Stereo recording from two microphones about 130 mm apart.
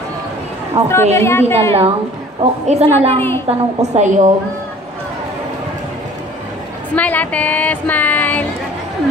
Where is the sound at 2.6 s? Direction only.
50° right (ahead or behind).